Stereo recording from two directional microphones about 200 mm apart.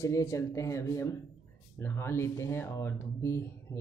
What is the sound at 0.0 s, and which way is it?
Speech, 15° left (ahead or behind).